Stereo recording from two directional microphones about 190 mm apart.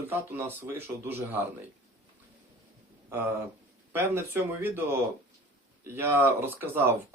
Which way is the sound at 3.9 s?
10° right (ahead or behind).